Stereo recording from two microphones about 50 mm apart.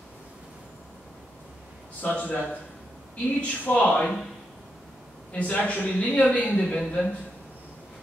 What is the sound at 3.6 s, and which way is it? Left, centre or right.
Speech, left.